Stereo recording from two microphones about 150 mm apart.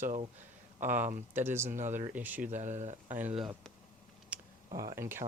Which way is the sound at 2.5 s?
50° right (ahead or behind).